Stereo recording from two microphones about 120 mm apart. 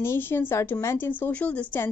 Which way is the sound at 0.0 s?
20° left (ahead or behind).